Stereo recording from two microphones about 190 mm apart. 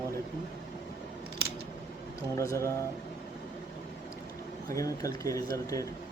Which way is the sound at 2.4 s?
15° left (ahead or behind).